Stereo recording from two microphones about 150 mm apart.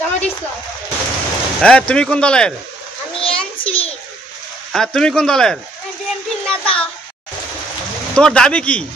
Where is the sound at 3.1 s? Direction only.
35° left (ahead or behind).